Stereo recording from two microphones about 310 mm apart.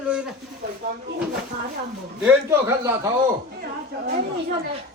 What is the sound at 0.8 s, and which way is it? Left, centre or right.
Speech, right.